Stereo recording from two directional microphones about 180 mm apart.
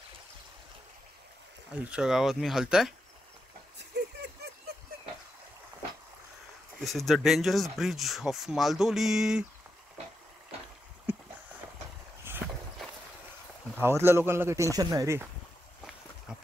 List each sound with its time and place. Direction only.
1.8 s speech: 5° right (ahead or behind)
3.7 s a sound: 70° right (ahead or behind)
6.8 s speech: centre (ahead or behind)
11.1 s a sound: 10° right (ahead or behind)
12.3 s walk: 10° right (ahead or behind)
13.7 s speech: 15° right (ahead or behind)